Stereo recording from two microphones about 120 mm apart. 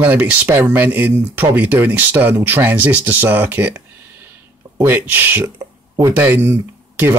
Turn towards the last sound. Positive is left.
turn(degrees=-20)  # may be behind; listen again after turning